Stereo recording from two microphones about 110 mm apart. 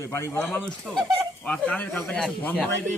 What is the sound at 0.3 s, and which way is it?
A man's voice, 5° left (ahead or behind).